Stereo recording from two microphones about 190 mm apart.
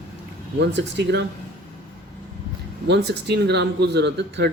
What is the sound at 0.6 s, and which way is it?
Speech, 65° right (ahead or behind).